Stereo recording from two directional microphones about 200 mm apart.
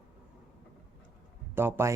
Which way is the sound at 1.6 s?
10° right (ahead or behind).